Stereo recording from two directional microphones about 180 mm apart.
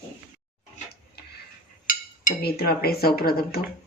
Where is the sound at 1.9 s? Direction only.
55° left (ahead or behind).